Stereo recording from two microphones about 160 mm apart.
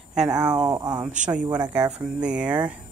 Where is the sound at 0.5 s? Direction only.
25° right (ahead or behind).